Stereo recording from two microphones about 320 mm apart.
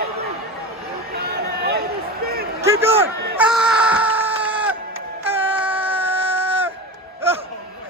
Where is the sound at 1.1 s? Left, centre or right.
Right.